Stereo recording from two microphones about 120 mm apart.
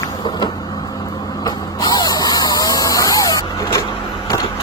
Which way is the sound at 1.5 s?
35° left (ahead or behind).